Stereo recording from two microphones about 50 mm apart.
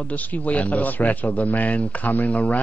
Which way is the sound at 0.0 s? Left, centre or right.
Left.